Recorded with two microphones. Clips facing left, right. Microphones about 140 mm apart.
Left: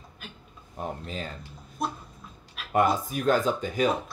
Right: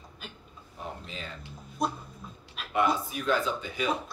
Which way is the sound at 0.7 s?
45° left (ahead or behind).